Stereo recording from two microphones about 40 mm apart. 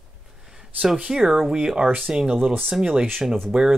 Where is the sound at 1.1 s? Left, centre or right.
Centre.